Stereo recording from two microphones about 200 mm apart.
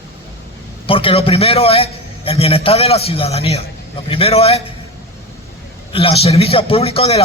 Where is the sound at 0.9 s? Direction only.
25° left (ahead or behind).